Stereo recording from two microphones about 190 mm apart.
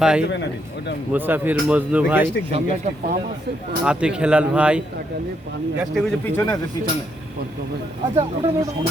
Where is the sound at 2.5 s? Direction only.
40° right (ahead or behind).